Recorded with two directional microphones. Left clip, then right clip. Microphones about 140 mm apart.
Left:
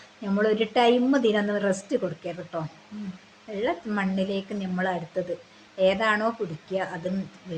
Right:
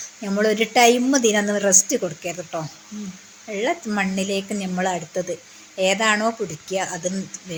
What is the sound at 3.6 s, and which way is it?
A woman's voice, 35° right (ahead or behind).